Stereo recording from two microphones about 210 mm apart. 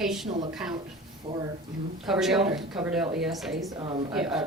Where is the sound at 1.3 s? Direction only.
25° right (ahead or behind).